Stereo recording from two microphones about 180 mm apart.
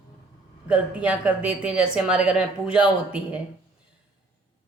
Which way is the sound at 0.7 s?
5° right (ahead or behind).